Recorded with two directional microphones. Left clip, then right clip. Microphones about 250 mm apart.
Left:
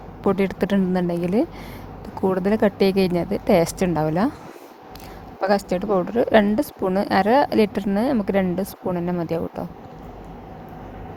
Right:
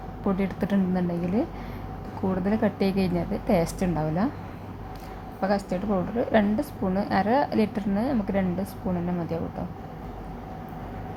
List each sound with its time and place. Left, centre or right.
0.3 s a woman's voice: left
5.4 s a woman's voice: left